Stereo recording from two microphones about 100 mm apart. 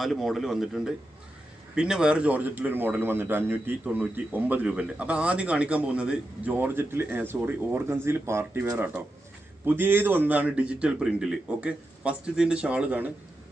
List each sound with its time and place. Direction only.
0.0 s a man's voice: centre (ahead or behind)